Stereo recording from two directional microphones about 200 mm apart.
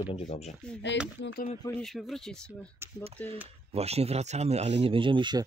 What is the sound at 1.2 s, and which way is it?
Speech, 50° left (ahead or behind).